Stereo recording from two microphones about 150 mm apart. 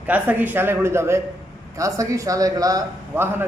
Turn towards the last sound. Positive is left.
turn(degrees=-15)  # may be behind; listen again after turning